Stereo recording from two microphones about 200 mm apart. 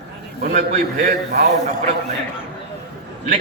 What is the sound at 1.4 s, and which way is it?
Speech, 35° right (ahead or behind).